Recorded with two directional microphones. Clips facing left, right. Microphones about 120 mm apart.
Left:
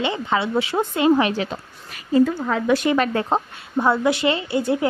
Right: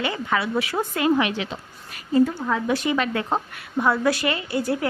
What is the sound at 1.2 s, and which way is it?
Speech, 35° left (ahead or behind).